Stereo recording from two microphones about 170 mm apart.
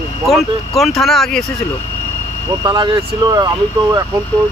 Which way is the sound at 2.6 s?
25° right (ahead or behind).